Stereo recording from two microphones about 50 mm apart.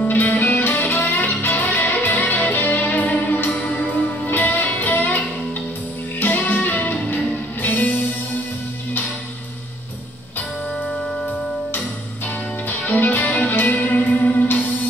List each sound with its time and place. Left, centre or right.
0.0 s music: left
12.6 s music: left